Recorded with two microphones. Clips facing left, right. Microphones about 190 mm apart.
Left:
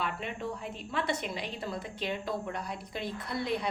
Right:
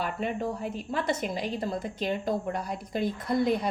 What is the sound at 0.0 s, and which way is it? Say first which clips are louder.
A woman's voice: right 5 dB; 45° right (ahead or behind).